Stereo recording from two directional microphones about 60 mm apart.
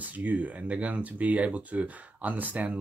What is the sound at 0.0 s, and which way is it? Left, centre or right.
Speech, right.